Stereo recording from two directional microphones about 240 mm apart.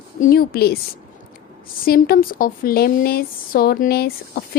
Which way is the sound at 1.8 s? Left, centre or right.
Left.